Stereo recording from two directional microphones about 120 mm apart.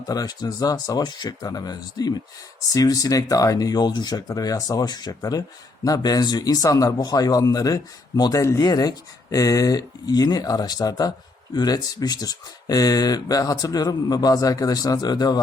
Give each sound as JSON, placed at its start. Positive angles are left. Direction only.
{"t": 0.1, "sound": "speech", "side_deg": 35}